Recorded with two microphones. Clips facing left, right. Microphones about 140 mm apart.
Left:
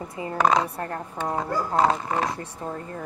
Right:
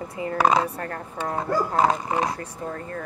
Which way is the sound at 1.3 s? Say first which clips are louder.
Right 1 dB; 5° right (ahead or behind).